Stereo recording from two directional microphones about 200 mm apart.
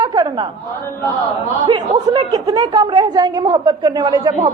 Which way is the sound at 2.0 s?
20° right (ahead or behind).